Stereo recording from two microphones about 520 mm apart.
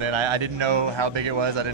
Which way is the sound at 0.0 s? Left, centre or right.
Right.